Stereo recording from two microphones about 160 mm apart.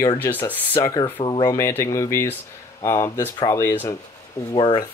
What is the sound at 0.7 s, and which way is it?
Speech, 25° left (ahead or behind).